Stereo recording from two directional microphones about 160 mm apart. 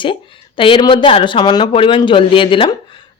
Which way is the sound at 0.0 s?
30° left (ahead or behind).